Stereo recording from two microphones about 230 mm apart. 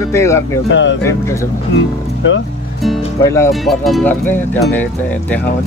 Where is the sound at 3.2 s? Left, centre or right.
Centre.